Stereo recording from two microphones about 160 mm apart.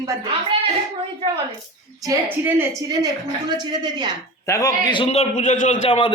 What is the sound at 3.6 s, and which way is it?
Speech, 25° right (ahead or behind).